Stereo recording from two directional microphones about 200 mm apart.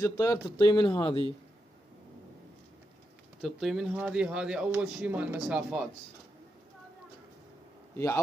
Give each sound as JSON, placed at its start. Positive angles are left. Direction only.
{"t": 0.0, "sound": "speech", "side_deg": 15}
{"t": 3.4, "sound": "speech", "side_deg": 0}